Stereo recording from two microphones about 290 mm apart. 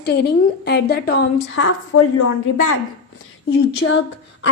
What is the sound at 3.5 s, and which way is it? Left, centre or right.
Speech, left.